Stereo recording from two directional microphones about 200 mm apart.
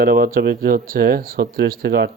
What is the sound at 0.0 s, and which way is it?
Speech, 45° right (ahead or behind).